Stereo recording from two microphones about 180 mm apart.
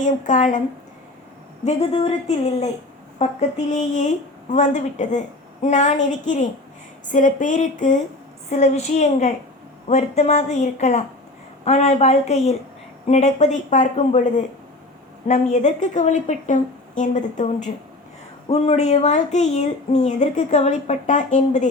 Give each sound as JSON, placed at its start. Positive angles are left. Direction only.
{"t": 0.0, "sound": "a woman's voice", "side_deg": 45}
{"t": 1.6, "sound": "a woman's voice", "side_deg": 35}
{"t": 18.4, "sound": "speech", "side_deg": 35}